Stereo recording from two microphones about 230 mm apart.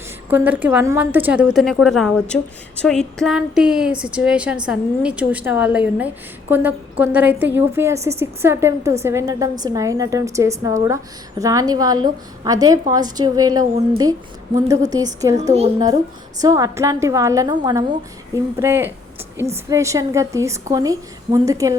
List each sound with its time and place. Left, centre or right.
0.3 s a woman's voice: centre
16.4 s a woman's voice: centre